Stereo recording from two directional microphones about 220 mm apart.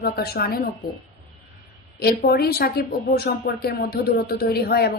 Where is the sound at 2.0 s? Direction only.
45° left (ahead or behind).